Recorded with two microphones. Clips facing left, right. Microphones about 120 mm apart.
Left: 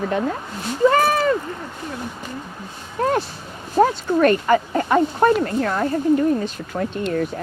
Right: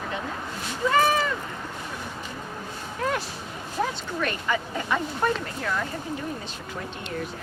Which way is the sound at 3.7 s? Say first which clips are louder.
Left 12 dB; 50° left (ahead or behind).